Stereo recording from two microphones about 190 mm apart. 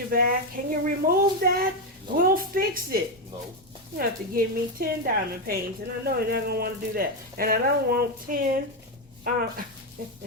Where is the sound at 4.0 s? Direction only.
50° right (ahead or behind).